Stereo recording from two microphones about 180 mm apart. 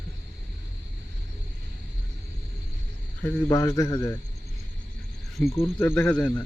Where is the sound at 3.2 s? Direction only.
15° left (ahead or behind).